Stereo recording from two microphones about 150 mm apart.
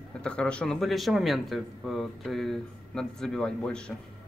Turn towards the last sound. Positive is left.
turn(degrees=5)  # may be behind; listen again after turning